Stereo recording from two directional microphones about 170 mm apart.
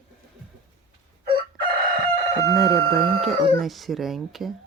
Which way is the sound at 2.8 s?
35° right (ahead or behind).